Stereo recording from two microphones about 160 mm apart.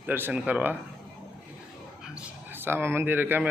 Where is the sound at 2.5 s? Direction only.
15° right (ahead or behind).